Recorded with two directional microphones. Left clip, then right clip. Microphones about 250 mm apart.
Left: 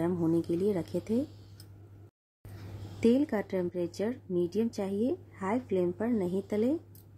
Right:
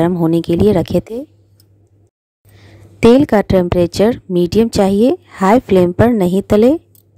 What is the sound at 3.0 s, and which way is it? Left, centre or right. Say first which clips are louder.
A woman's voice: right 18 dB; right.